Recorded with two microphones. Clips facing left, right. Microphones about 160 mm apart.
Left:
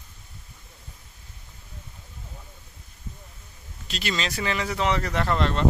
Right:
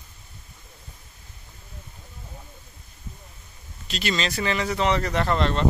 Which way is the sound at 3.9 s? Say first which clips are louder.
Right 3 dB; 5° left (ahead or behind).